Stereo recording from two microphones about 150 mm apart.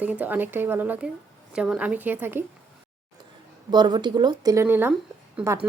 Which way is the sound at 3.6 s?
30° right (ahead or behind).